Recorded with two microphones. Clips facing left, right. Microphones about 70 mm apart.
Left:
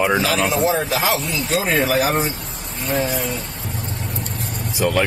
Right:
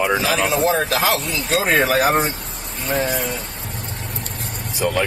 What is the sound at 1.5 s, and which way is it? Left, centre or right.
Speech, right.